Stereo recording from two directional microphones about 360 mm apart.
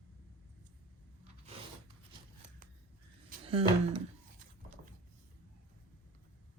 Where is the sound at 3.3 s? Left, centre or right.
Centre.